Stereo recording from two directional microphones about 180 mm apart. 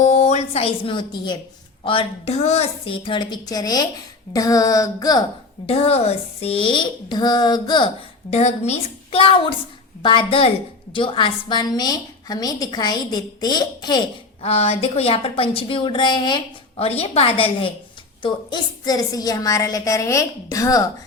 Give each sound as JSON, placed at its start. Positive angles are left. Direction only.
{"t": 0.0, "sound": "a woman's voice", "side_deg": 40}
{"t": 5.6, "sound": "a woman's voice", "side_deg": 35}
{"t": 8.3, "sound": "a woman's voice", "side_deg": 40}
{"t": 14.4, "sound": "a woman's voice", "side_deg": 35}